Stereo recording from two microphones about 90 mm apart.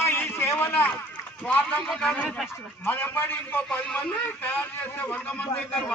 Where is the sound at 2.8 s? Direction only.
20° left (ahead or behind).